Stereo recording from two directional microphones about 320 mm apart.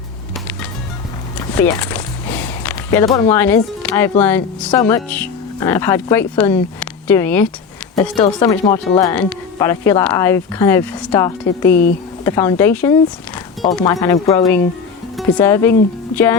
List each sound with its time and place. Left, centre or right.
1.5 s a sound: centre
4.2 s speech: centre
11.7 s speech: left
12.2 s speech: centre